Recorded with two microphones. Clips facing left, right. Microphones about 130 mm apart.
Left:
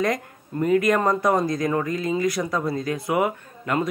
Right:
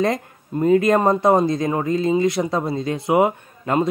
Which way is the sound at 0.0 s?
30° right (ahead or behind).